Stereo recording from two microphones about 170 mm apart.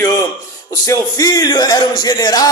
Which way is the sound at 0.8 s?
20° left (ahead or behind).